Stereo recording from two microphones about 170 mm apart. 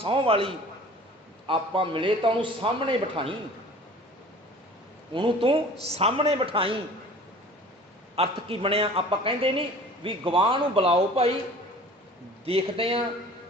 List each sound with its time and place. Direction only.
0.0 s a man's voice: 35° right (ahead or behind)
5.1 s a man's voice: 30° right (ahead or behind)
8.1 s a man's voice: 35° right (ahead or behind)
12.5 s a man's voice: 35° right (ahead or behind)